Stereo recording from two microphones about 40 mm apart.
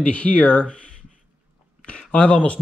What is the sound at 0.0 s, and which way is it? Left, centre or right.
Speech, left.